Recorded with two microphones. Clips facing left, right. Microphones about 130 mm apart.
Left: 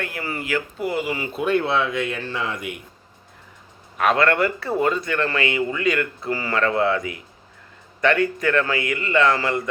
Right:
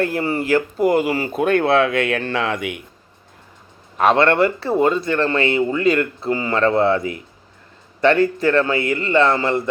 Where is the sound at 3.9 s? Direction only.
30° right (ahead or behind).